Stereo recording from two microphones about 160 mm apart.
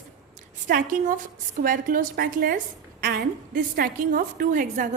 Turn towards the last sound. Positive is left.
turn(degrees=-55)  # may be behind; listen again after turning